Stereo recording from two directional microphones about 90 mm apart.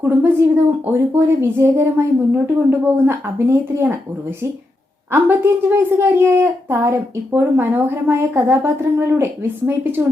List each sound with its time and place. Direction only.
0.0 s a woman's voice: 20° right (ahead or behind)
5.1 s a woman's voice: 25° right (ahead or behind)